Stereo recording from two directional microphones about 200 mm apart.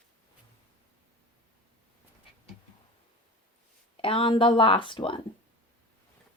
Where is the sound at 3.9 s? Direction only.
30° left (ahead or behind).